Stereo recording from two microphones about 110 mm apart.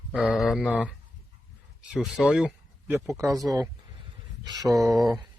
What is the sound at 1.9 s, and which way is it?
Speech, 5° right (ahead or behind).